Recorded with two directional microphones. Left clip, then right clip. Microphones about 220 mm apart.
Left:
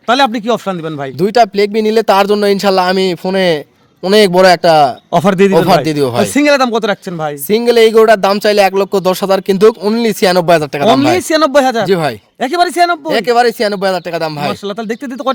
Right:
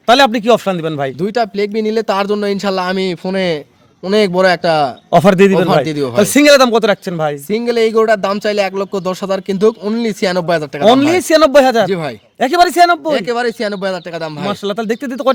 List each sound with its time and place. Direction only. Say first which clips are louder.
0.1 s speech: right 2 dB; 10° right (ahead or behind)
1.2 s speech: left 8 dB; 45° left (ahead or behind)
5.1 s speech: right 3 dB; 5° right (ahead or behind)
5.5 s speech: left 3 dB; 45° left (ahead or behind)
6.2 s speech: right 5 dB; 15° right (ahead or behind)
7.4 s speech: left 8 dB; 45° left (ahead or behind)
11.2 s speech: right 1 dB; 5° right (ahead or behind)
11.9 s speech: left 6 dB; 45° left (ahead or behind)
12.4 s speech: right 2 dB; 10° right (ahead or behind)
13.1 s speech: left 5 dB; 45° left (ahead or behind)
14.6 s speech: right 2 dB; 10° right (ahead or behind)